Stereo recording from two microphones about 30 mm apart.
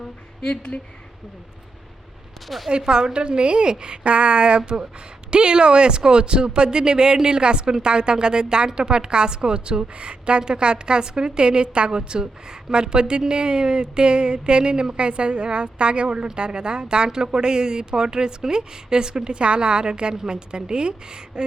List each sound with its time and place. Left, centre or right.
0.4 s speech: left
2.6 s a woman's voice: right